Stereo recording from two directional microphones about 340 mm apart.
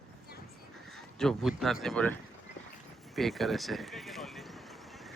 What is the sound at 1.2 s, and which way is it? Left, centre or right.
Speech, centre.